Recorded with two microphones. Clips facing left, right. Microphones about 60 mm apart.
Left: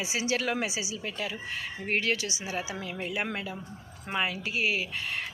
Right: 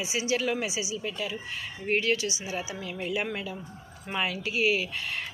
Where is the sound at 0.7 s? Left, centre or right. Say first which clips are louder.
Right 2 dB; left.